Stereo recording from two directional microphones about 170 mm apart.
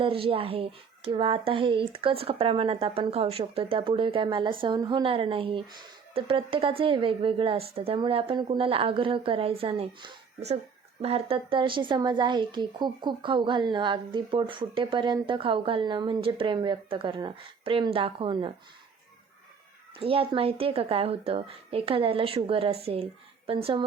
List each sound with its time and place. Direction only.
0.0 s a woman's voice: 30° right (ahead or behind)
20.0 s speech: 30° right (ahead or behind)